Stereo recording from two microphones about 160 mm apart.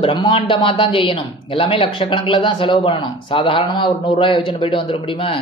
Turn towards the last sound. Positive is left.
turn(degrees=30)  # may be behind; listen again after turning